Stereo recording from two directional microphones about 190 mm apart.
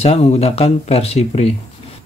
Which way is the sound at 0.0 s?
35° left (ahead or behind).